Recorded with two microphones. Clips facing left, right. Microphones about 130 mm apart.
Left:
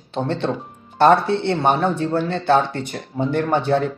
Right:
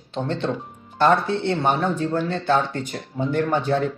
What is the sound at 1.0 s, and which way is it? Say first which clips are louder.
A man's voice: left 4 dB; 25° left (ahead or behind).